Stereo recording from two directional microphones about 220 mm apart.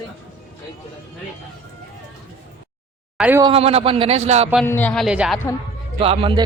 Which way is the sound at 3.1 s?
5° right (ahead or behind).